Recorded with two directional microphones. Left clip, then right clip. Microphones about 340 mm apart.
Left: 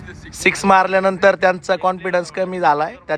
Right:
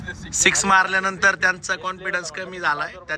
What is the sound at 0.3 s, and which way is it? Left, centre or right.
Speech, centre.